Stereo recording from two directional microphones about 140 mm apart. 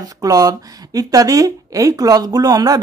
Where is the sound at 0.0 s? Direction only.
25° right (ahead or behind).